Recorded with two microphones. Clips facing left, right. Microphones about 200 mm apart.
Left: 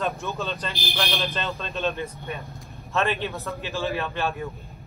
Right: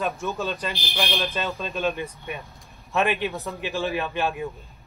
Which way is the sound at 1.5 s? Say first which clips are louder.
Right 1 dB; 10° right (ahead or behind).